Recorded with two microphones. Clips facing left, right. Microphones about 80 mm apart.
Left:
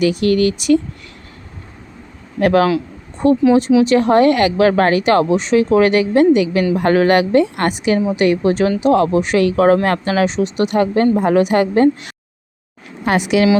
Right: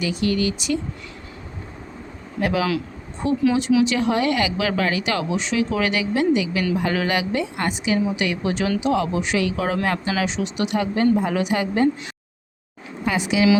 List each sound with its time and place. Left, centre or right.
0.0 s speech: left
2.4 s speech: left
8.0 s speech: left
13.1 s speech: left